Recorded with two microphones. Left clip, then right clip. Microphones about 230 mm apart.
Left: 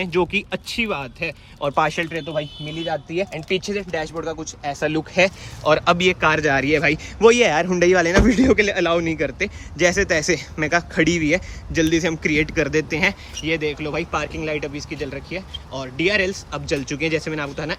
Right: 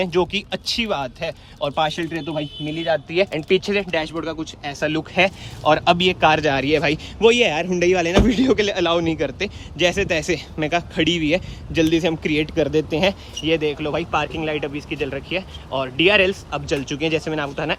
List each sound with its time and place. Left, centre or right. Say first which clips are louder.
0.0 s a man's voice: even; centre
3.7 s speech: right 4 dB; centre
6.0 s a man's voice: right 1 dB; centre